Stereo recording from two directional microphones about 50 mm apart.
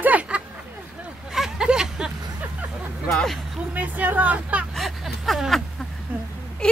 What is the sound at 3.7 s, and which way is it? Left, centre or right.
Hubbub, right.